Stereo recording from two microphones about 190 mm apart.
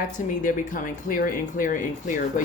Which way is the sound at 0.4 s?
45° left (ahead or behind).